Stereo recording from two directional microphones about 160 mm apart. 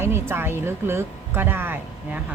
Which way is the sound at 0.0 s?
15° right (ahead or behind).